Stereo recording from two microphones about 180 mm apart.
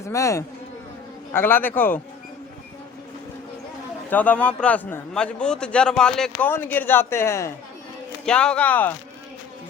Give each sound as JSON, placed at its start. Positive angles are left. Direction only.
{"t": 0.0, "sound": "a man's voice", "side_deg": 15}
{"t": 4.1, "sound": "a man's voice", "side_deg": 10}
{"t": 8.2, "sound": "a man's voice", "side_deg": 5}